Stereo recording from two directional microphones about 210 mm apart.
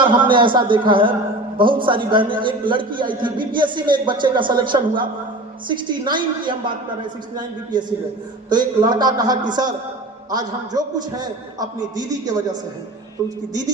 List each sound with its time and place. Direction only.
0.0 s a man's voice: 25° right (ahead or behind)